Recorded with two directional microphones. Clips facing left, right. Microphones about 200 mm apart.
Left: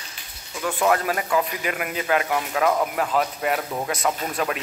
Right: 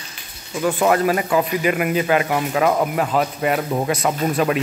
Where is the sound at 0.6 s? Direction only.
35° right (ahead or behind).